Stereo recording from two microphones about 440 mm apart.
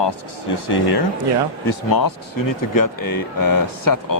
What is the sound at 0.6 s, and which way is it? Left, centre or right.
Speech, left.